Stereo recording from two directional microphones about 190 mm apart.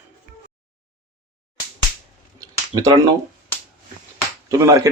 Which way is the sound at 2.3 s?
20° right (ahead or behind).